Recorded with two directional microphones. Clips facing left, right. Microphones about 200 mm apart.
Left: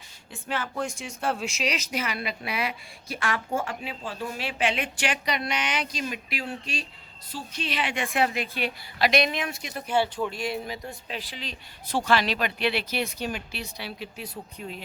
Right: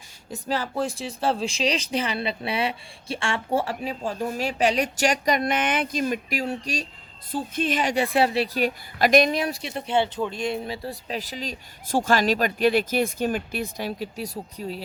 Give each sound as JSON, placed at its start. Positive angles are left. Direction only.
{"t": 0.3, "sound": "speech", "side_deg": -40}
{"t": 7.3, "sound": "speech", "side_deg": -50}
{"t": 10.8, "sound": "speech", "side_deg": -40}